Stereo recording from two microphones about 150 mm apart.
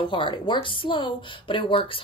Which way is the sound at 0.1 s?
35° left (ahead or behind).